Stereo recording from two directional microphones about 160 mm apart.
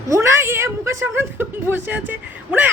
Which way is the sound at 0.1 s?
15° right (ahead or behind).